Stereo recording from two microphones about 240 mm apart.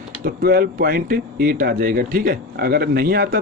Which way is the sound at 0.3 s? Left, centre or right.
Right.